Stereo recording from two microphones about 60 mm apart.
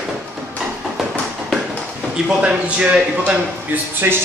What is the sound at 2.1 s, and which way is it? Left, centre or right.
Speech, centre.